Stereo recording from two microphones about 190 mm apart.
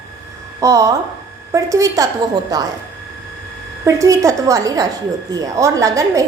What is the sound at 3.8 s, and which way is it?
A woman's voice, 15° right (ahead or behind).